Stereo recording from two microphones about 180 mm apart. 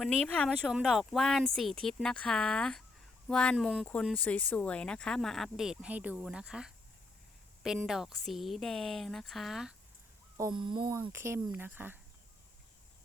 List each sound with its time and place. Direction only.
0.0 s speech: centre (ahead or behind)
7.9 s speech: centre (ahead or behind)
10.3 s speech: 20° right (ahead or behind)